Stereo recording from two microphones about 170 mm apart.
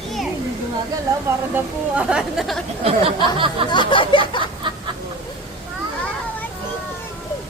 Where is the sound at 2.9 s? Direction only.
30° right (ahead or behind).